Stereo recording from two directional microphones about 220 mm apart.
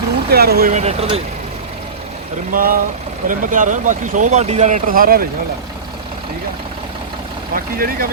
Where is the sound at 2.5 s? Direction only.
40° right (ahead or behind).